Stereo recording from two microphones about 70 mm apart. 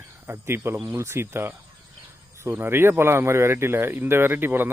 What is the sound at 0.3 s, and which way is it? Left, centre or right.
Speech, right.